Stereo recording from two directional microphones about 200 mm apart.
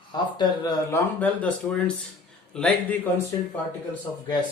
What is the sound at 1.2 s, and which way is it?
A man's voice, 5° left (ahead or behind).